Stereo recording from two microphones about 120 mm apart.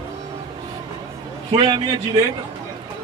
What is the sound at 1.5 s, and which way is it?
Speech, 35° right (ahead or behind).